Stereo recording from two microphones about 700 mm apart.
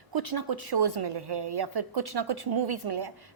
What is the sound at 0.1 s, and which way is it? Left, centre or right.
A woman's voice, right.